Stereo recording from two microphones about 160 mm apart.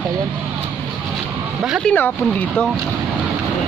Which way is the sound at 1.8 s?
10° left (ahead or behind).